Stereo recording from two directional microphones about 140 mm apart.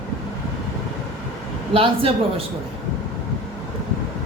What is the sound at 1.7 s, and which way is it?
Speech, 40° right (ahead or behind).